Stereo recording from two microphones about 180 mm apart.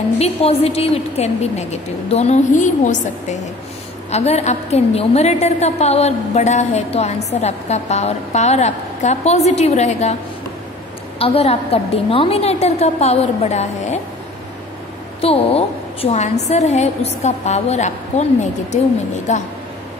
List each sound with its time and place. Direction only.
0.2 s a woman's voice: 35° left (ahead or behind)
11.1 s a woman's voice: 35° left (ahead or behind)
15.1 s a woman's voice: 35° left (ahead or behind)